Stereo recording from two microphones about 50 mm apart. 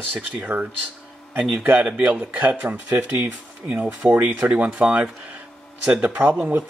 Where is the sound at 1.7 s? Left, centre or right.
Right.